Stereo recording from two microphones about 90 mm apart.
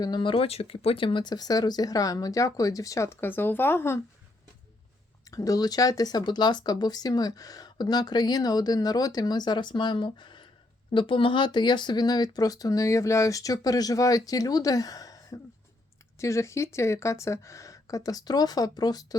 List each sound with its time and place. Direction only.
0.0 s speech: 55° left (ahead or behind); by 4.0 s 25° left (ahead or behind)
5.3 s speech: 40° left (ahead or behind); by 10.5 s 60° left (ahead or behind)
10.9 s speech: 70° left (ahead or behind); by 19.0 s 45° left (ahead or behind)